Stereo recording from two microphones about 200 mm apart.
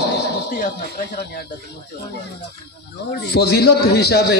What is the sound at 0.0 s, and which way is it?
Dog, 55° left (ahead or behind).